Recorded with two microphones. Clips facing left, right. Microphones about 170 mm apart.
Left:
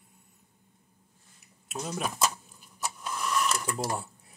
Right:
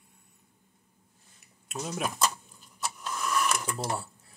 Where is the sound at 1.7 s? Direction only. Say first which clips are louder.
Even; centre (ahead or behind).